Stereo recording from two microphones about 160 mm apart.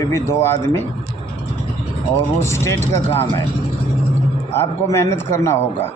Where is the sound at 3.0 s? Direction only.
35° left (ahead or behind).